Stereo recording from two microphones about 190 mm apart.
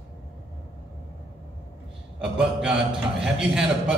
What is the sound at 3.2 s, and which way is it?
Speech, 5° right (ahead or behind).